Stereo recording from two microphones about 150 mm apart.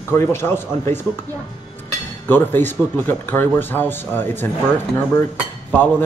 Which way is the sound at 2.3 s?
15° left (ahead or behind).